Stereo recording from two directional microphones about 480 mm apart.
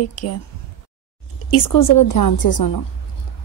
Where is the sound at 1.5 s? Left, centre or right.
Left.